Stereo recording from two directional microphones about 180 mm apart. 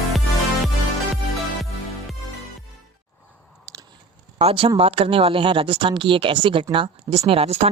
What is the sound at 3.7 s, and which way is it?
Biting, 20° right (ahead or behind).